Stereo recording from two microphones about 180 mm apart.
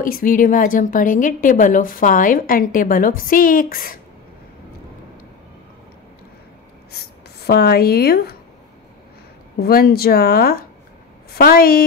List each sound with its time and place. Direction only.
0.0 s a woman's voice: 50° left (ahead or behind)
6.9 s speech: 60° left (ahead or behind)
9.6 s a woman's voice: 60° left (ahead or behind)